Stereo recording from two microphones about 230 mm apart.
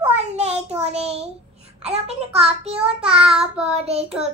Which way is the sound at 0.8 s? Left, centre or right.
Right.